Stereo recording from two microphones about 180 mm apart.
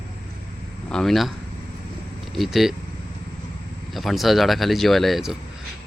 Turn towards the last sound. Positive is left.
turn(degrees=0)  # may be behind; listen again after turning